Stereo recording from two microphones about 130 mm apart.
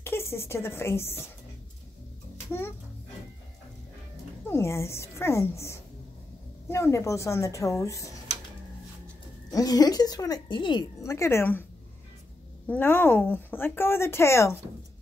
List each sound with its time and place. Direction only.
0.0 s a woman's voice: 20° left (ahead or behind)
4.5 s a woman's voice: 20° left (ahead or behind)
9.5 s a woman's voice: 30° left (ahead or behind)
11.1 s a woman's voice: 20° left (ahead or behind)
12.6 s speech: 15° left (ahead or behind)